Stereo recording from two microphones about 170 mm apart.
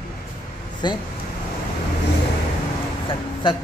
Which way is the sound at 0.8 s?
25° left (ahead or behind).